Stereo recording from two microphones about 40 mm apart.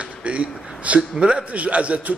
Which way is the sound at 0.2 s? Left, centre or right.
Right.